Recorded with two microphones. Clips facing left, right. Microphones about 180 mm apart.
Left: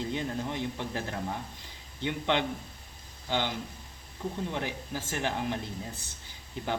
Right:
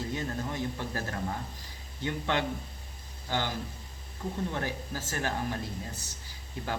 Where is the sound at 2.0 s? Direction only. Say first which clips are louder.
Left 1 dB; 20° left (ahead or behind).